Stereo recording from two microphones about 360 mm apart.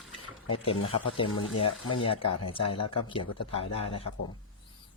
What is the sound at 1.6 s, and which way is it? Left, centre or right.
Speech, left.